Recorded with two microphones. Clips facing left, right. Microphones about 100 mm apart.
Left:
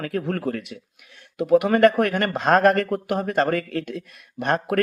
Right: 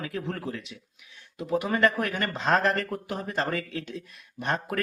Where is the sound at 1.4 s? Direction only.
70° left (ahead or behind).